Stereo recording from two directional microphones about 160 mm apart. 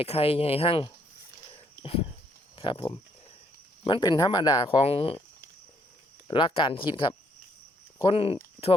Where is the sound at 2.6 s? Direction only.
30° left (ahead or behind).